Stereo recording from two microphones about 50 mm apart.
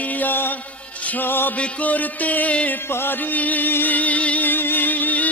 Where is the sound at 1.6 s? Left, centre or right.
Left.